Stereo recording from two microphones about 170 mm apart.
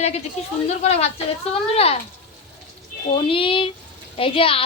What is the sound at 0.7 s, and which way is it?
Speech, 40° left (ahead or behind).